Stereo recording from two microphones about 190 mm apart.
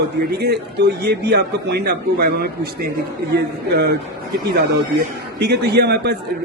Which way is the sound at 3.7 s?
55° right (ahead or behind).